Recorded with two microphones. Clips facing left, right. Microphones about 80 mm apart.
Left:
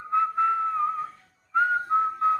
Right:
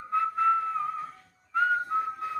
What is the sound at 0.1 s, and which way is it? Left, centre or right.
Whistling, left.